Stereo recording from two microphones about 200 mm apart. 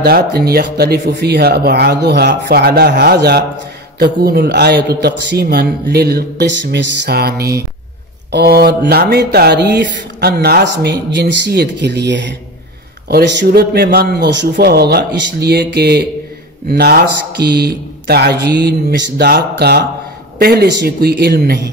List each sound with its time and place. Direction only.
0.0 s speech: 50° right (ahead or behind)